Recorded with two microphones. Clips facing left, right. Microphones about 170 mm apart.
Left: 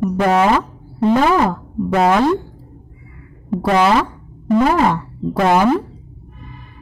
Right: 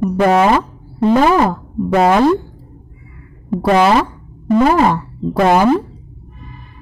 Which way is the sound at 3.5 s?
35° right (ahead or behind).